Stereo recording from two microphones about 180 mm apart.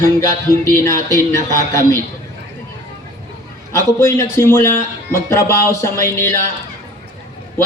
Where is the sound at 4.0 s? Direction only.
15° left (ahead or behind).